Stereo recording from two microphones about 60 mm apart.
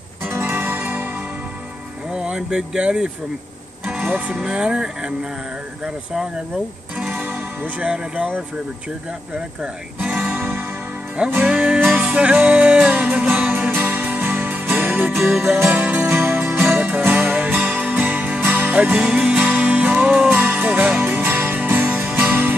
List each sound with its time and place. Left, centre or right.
0.3 s music: right
2.1 s speech: centre
7.1 s music: right
7.8 s speech: centre
10.3 s music: right
11.4 s music: centre; by 18.7 s right
18.7 s music: right